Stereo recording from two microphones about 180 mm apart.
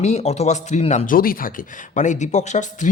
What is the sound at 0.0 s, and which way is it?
A man's voice, 40° left (ahead or behind).